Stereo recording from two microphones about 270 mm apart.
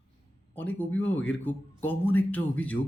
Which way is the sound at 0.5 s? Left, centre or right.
Centre.